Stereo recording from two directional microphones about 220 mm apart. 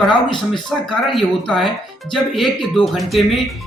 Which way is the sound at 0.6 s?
Centre (ahead or behind).